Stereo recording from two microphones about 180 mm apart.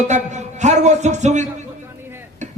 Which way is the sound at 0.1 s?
40° right (ahead or behind).